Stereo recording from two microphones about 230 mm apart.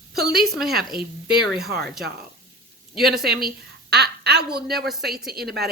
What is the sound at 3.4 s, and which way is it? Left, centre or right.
A woman's voice, right.